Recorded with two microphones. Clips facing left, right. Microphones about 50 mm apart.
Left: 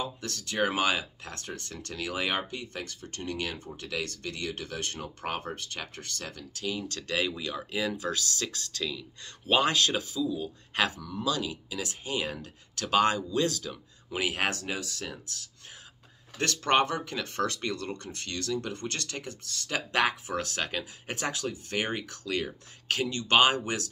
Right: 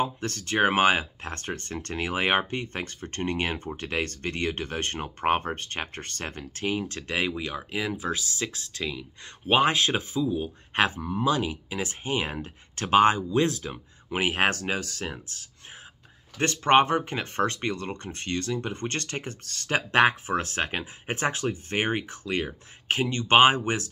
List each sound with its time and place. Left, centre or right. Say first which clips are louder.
0.0 s speech: right 7 dB; right
6.9 s speech: right 2 dB; right
16.3 s speech: right 5 dB; right